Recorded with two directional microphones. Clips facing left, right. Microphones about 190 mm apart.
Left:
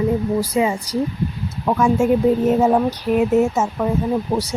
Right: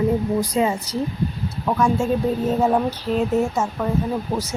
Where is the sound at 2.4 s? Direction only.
15° left (ahead or behind).